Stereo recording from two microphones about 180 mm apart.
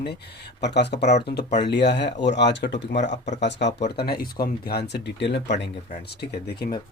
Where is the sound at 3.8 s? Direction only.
65° left (ahead or behind).